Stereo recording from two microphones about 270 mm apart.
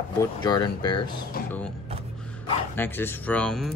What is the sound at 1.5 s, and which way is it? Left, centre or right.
Speech, centre.